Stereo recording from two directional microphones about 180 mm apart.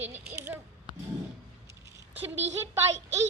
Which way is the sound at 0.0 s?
10° right (ahead or behind).